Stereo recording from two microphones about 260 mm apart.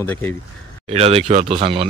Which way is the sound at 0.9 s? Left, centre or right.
Right.